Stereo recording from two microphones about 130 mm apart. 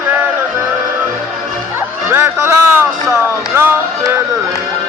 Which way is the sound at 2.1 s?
20° right (ahead or behind).